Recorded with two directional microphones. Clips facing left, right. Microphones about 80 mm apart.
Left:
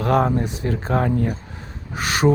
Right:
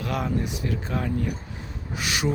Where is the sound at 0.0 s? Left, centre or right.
Left.